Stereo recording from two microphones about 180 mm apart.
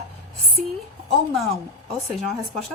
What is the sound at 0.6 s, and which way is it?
Speech, 45° right (ahead or behind).